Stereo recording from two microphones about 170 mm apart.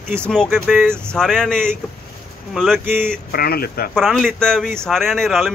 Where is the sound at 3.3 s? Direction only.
65° left (ahead or behind).